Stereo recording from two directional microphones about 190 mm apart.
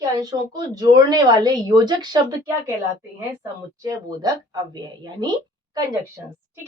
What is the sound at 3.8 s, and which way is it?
Speech, 15° right (ahead or behind).